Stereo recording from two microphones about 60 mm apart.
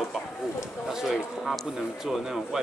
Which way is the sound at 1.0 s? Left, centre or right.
Centre.